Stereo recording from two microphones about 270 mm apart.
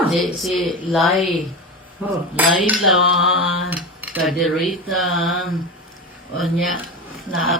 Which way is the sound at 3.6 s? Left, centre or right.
Centre.